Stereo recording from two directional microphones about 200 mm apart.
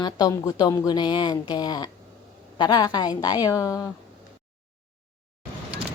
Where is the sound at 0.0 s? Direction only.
20° left (ahead or behind).